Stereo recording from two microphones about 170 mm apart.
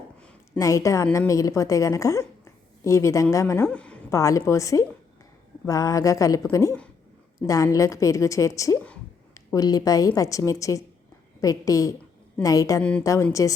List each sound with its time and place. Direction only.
0.6 s a woman's voice: 20° left (ahead or behind)
4.1 s a woman's voice: 20° left (ahead or behind)